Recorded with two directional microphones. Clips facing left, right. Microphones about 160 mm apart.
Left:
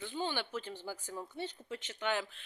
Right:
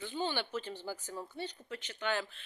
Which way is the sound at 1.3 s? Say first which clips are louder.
Left 1 dB; 25° left (ahead or behind).